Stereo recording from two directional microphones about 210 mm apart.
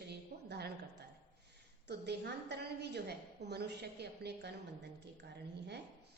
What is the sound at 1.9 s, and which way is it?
A woman's voice, 55° right (ahead or behind).